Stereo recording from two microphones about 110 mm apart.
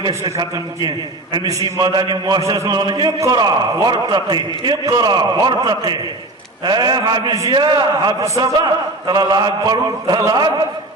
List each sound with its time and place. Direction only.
0.3 s a man's voice: 40° right (ahead or behind)